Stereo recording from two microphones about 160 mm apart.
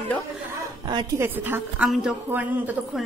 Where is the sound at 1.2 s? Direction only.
10° right (ahead or behind).